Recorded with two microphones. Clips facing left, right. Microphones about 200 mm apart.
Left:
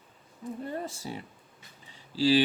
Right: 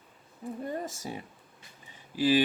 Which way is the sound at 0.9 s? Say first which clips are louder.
Even; 20° right (ahead or behind).